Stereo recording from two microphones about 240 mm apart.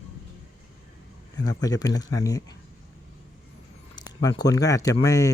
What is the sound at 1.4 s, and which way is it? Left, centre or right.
Speech, centre.